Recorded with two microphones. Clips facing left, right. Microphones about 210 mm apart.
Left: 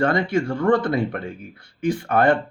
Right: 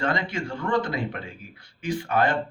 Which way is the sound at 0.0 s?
55° left (ahead or behind).